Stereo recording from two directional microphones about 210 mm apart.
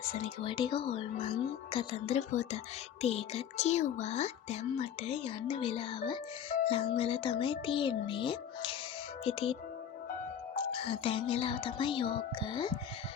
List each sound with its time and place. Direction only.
0.2 s a woman's voice: 25° left (ahead or behind)
6.5 s music: 40° left (ahead or behind)
6.9 s speech: 25° left (ahead or behind)